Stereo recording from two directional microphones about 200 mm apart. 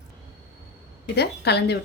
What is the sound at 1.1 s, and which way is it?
Speech, 55° left (ahead or behind).